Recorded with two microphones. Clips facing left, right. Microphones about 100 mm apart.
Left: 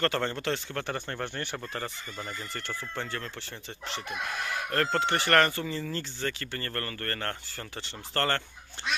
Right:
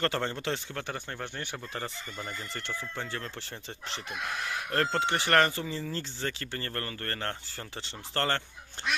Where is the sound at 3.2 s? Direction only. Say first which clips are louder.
Even; 30° right (ahead or behind).